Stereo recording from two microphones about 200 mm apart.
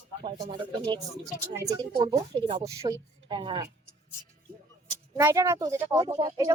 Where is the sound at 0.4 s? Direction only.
25° right (ahead or behind).